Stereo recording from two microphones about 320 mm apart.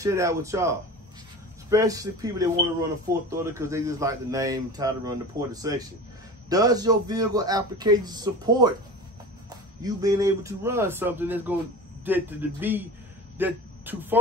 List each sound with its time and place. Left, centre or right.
0.0 s speech: centre